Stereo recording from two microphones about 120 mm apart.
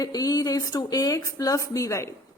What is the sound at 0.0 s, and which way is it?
A woman's voice, 30° left (ahead or behind).